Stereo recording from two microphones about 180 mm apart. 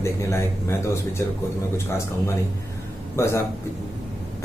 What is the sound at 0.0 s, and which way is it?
A man's voice, 15° left (ahead or behind).